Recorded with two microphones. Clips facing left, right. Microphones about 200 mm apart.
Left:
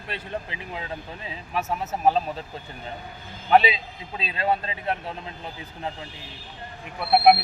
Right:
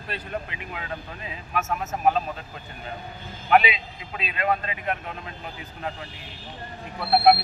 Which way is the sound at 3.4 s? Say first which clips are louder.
Left 1 dB; 30° left (ahead or behind).